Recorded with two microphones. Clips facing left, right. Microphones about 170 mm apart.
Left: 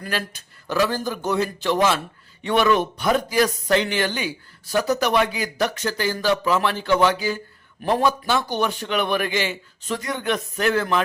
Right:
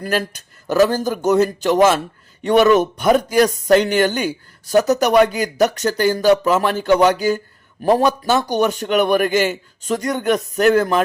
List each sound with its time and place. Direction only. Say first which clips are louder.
0.0 s a man's voice: right 7 dB; 45° right (ahead or behind)